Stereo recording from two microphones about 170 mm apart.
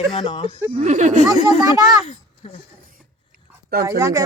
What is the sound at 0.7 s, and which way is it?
Speech, 45° right (ahead or behind).